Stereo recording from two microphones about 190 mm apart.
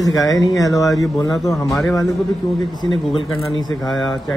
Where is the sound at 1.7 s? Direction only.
Centre (ahead or behind).